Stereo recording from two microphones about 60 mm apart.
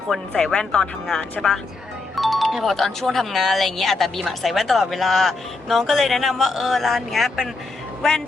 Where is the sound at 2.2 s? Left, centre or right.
Centre.